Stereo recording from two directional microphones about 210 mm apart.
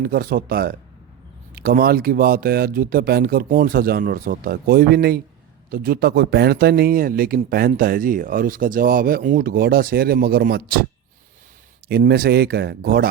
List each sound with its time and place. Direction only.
0.0 s speech: 45° right (ahead or behind)
11.9 s speech: 50° right (ahead or behind)